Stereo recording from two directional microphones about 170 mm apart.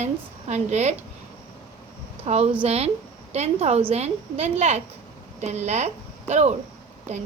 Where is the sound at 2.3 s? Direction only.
45° right (ahead or behind).